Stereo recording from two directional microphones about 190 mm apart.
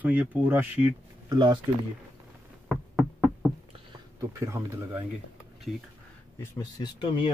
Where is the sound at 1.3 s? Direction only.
20° right (ahead or behind).